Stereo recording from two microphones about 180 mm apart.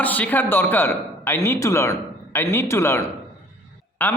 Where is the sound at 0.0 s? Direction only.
10° left (ahead or behind).